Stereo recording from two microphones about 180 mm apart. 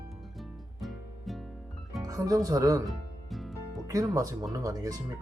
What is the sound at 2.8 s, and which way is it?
Music, centre (ahead or behind).